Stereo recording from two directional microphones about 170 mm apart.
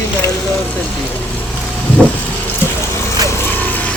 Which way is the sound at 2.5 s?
15° left (ahead or behind).